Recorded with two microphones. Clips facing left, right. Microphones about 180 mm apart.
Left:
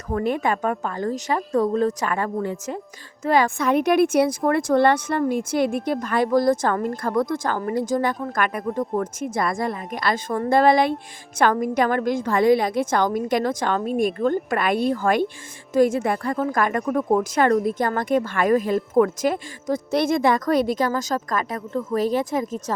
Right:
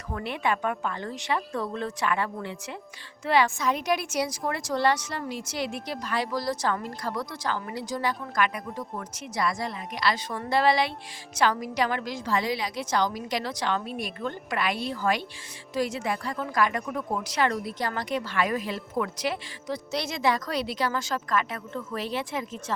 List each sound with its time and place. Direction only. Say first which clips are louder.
0.1 s a woman's voice: left 7 dB; 45° left (ahead or behind)